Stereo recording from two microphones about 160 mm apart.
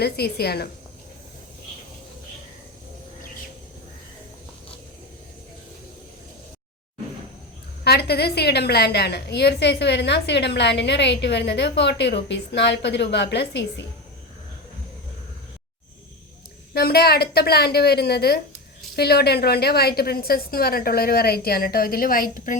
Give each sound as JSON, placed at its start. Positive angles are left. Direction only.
{"t": 0.0, "sound": "a woman's voice", "side_deg": 85}
{"t": 7.9, "sound": "a woman's voice", "side_deg": 90}
{"t": 16.7, "sound": "a woman's voice", "side_deg": 75}